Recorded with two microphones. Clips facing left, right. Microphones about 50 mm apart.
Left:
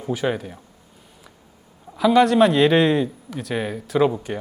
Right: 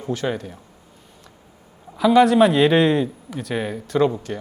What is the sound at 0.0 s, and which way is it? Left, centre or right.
Speech, centre.